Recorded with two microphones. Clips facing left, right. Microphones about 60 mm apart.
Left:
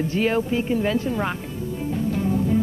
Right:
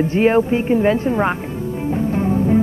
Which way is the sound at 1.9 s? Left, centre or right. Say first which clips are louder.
Right 4 dB; right.